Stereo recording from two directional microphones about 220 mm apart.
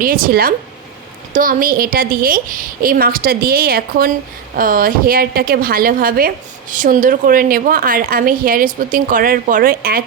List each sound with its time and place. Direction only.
0.0 s a woman's voice: 40° right (ahead or behind)